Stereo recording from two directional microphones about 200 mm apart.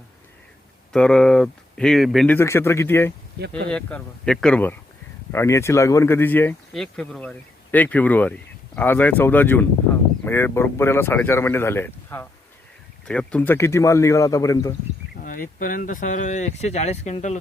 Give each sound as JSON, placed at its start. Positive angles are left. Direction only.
{"t": 0.9, "sound": "speech", "side_deg": 5}
{"t": 15.1, "sound": "speech", "side_deg": 45}